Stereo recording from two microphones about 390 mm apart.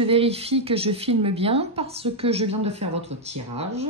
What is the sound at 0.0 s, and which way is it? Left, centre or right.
A woman's voice, centre.